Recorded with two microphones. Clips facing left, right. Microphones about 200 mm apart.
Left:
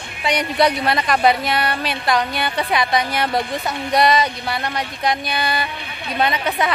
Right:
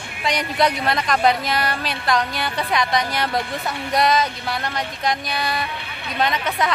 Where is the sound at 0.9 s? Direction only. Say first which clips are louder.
Left 2 dB; 5° left (ahead or behind).